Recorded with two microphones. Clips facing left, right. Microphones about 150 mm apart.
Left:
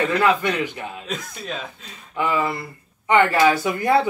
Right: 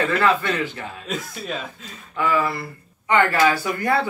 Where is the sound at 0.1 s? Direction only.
15° left (ahead or behind).